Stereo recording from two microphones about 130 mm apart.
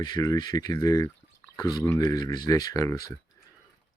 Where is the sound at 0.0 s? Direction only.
30° left (ahead or behind).